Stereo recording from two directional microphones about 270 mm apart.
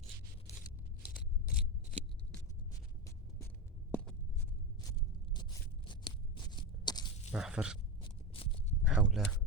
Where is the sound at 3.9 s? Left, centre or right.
Centre.